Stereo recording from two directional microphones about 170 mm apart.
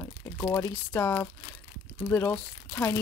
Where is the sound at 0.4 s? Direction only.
15° left (ahead or behind).